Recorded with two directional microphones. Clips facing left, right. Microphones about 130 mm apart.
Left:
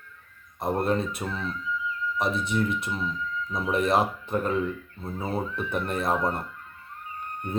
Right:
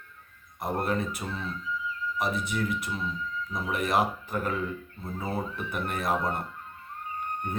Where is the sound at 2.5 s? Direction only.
25° left (ahead or behind).